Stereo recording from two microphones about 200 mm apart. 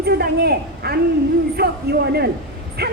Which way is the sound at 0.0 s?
50° right (ahead or behind).